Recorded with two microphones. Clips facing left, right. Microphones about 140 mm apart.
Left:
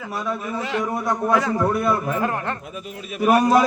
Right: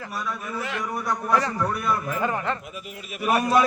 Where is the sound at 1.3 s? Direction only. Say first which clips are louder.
Left 2 dB; centre (ahead or behind).